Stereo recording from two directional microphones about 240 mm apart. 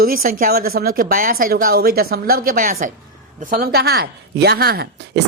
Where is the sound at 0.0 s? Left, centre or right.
Right.